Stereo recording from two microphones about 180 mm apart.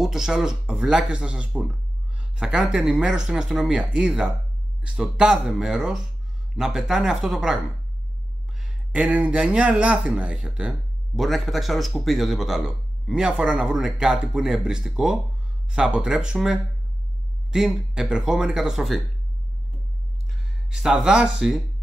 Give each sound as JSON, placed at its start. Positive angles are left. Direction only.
{"t": 0.0, "sound": "speech", "side_deg": -5}
{"t": 20.7, "sound": "speech", "side_deg": -5}